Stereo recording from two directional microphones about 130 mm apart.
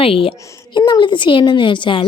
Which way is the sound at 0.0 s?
45° left (ahead or behind).